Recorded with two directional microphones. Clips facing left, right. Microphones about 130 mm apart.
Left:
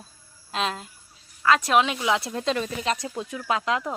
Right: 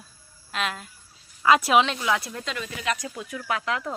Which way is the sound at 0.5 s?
30° left (ahead or behind).